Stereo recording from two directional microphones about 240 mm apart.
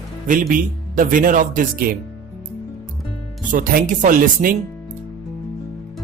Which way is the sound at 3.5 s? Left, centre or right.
Right.